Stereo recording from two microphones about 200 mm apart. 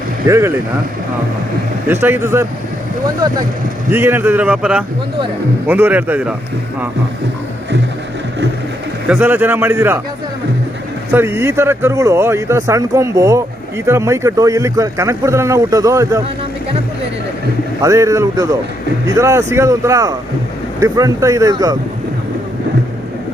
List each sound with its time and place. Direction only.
0.3 s speech: 15° right (ahead or behind)
1.9 s speech: 10° right (ahead or behind)
3.9 s speech: 10° right (ahead or behind)
9.0 s speech: 10° right (ahead or behind)
11.1 s speech: 10° right (ahead or behind)
17.8 s speech: 15° right (ahead or behind)